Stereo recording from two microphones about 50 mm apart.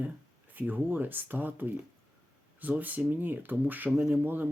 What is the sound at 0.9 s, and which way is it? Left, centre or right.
Speech, right.